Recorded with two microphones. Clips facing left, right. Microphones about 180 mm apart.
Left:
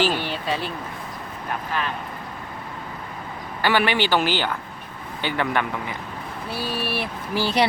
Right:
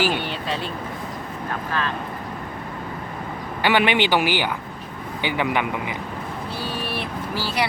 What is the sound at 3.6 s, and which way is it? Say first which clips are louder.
Speech: right 2 dB; 15° right (ahead or behind).